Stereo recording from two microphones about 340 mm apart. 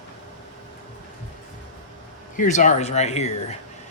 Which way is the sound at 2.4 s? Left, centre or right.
Left.